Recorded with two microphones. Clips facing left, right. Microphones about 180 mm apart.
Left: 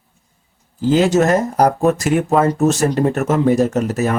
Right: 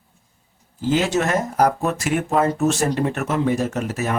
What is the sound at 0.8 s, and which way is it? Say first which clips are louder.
Speech: left 6 dB; 35° left (ahead or behind).